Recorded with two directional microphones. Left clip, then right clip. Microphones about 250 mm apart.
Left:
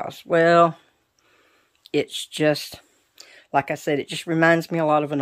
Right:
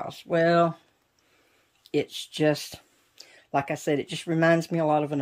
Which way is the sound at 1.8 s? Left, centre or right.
Centre.